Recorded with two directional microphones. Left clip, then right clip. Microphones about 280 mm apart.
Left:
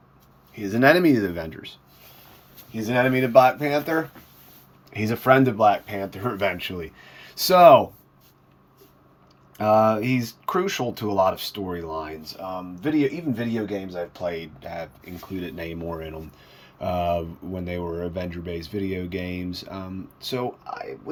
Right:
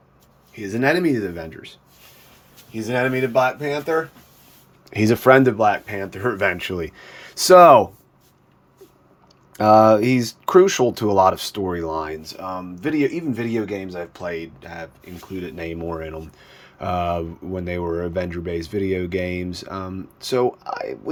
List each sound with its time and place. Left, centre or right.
0.5 s speech: centre
4.9 s speech: right
9.6 s speech: centre